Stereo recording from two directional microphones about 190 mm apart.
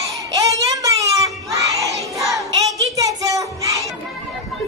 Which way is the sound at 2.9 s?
15° right (ahead or behind).